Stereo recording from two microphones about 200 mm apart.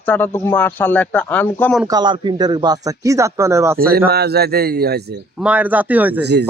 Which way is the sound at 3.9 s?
50° right (ahead or behind).